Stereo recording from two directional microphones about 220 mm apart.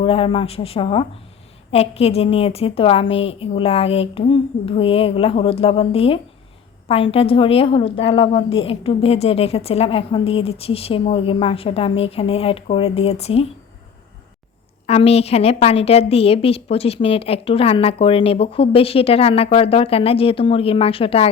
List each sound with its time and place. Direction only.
0.0 s a woman's voice: 25° left (ahead or behind)
14.8 s a woman's voice: 30° left (ahead or behind)